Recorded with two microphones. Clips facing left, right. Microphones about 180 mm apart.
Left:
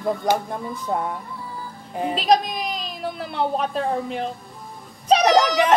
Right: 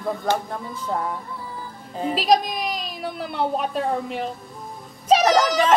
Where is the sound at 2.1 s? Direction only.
Centre (ahead or behind).